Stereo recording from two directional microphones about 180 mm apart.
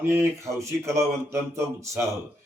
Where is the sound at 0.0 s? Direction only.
15° right (ahead or behind).